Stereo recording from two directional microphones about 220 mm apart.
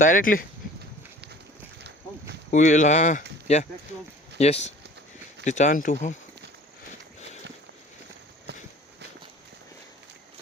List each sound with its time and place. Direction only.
0.0 s speech: 35° left (ahead or behind)
1.8 s a sound: 50° right (ahead or behind)
2.5 s speech: 35° left (ahead or behind)